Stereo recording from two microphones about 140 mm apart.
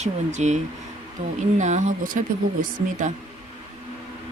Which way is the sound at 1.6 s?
60° right (ahead or behind).